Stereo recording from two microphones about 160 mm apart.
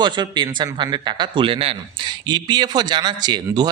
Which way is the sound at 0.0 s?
30° right (ahead or behind).